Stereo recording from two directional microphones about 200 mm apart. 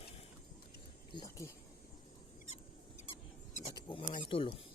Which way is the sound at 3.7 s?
25° left (ahead or behind).